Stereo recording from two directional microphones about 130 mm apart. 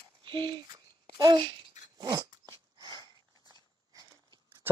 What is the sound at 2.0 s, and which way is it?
Dog, 30° right (ahead or behind).